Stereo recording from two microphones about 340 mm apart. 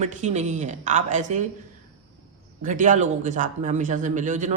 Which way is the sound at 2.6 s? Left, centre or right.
Right.